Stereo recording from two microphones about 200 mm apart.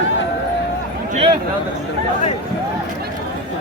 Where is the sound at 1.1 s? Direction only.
30° right (ahead or behind).